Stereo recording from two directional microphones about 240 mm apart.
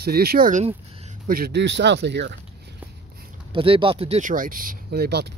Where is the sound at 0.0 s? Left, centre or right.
Right.